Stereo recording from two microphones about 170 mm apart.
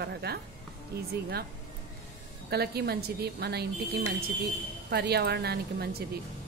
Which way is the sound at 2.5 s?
70° right (ahead or behind).